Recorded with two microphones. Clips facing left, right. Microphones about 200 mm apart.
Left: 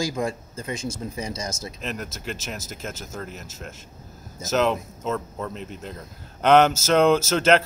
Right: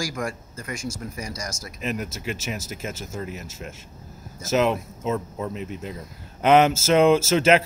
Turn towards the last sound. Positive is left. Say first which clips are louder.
# right 1 dB
turn(degrees=-5)  # may be behind; listen again after turning